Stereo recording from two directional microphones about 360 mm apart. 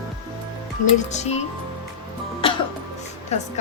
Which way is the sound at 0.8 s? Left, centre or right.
Left.